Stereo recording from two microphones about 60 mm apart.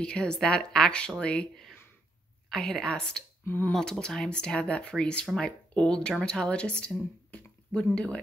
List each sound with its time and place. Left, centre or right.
0.0 s speech: centre
2.5 s speech: centre
3.4 s speech: left
3.7 s a woman's voice: centre